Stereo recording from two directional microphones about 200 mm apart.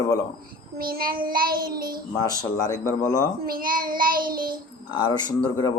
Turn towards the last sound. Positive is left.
turn(degrees=20)  # may be behind; listen again after turning